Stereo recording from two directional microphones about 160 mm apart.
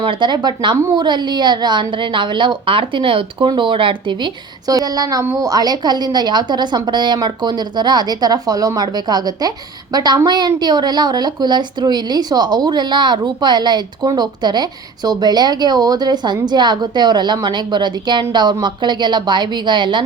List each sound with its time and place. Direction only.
0.0 s a woman's voice: 30° right (ahead or behind)